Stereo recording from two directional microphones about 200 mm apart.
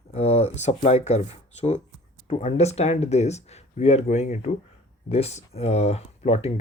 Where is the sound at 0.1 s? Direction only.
30° left (ahead or behind).